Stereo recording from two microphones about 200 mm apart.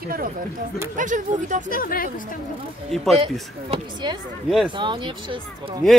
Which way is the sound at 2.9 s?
Centre (ahead or behind).